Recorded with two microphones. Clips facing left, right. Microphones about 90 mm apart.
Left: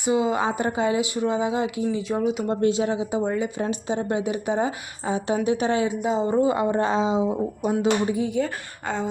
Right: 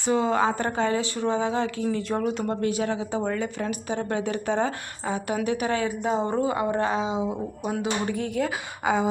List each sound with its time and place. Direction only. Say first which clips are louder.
0.0 s speech: even; 10° left (ahead or behind)
2.5 s speech: left 4 dB; 25° left (ahead or behind)
3.6 s a woman's voice: left 3 dB; 25° left (ahead or behind)
6.1 s speech: left 2 dB; 5° left (ahead or behind)
6.4 s a woman's voice: left 3 dB; 25° left (ahead or behind)
8.1 s speech: left 3 dB; 5° left (ahead or behind)